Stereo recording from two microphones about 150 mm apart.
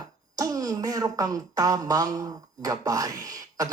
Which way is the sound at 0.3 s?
25° right (ahead or behind).